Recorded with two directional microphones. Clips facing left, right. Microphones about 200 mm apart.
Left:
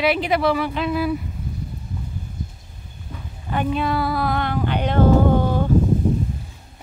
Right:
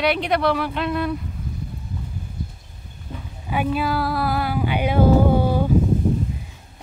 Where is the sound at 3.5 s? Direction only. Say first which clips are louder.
Even; 5° right (ahead or behind).